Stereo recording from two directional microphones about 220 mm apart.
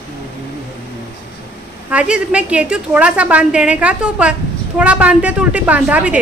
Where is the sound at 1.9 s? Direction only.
5° right (ahead or behind).